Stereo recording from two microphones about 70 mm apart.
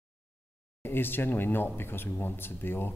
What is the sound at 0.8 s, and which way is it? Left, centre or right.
Speech, left.